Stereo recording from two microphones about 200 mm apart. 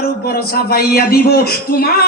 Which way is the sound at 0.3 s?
50° left (ahead or behind).